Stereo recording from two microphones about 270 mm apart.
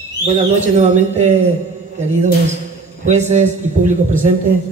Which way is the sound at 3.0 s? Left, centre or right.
Right.